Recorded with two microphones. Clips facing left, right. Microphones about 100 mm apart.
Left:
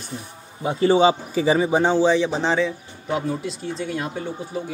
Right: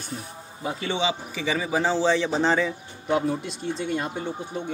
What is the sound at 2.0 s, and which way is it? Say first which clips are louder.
A man's voice: left 3 dB; 5° left (ahead or behind).